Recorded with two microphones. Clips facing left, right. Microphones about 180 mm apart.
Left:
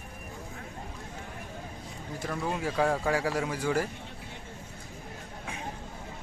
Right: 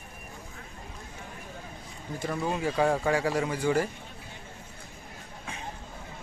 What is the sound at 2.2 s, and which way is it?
Speech, centre (ahead or behind).